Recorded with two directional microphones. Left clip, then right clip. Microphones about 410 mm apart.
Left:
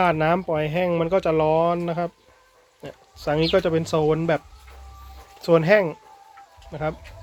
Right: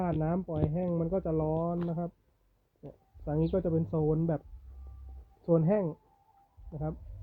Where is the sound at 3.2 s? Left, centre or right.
Centre.